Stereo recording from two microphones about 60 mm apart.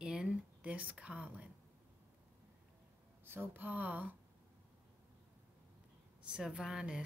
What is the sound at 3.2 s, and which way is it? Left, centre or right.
Speech, right.